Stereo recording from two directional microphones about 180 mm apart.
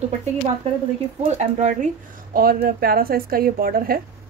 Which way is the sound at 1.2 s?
40° right (ahead or behind).